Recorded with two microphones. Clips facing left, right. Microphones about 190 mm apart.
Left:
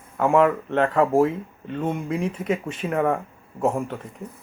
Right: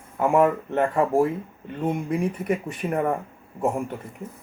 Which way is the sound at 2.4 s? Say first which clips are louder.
Even; 25° left (ahead or behind).